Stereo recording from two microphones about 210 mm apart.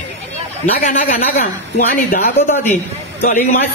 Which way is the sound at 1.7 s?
40° left (ahead or behind).